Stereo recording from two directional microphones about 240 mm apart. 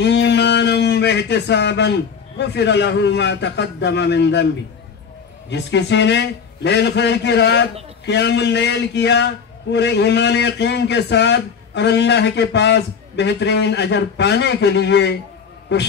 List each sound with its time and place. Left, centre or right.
0.0 s speech: left
5.5 s a man's voice: left